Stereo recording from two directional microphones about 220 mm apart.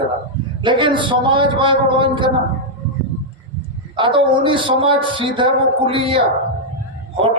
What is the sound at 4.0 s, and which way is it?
A man's voice, 20° right (ahead or behind).